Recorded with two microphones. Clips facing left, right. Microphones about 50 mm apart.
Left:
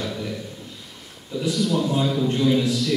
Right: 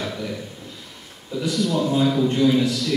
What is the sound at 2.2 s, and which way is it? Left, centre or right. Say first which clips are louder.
Speech: even; centre.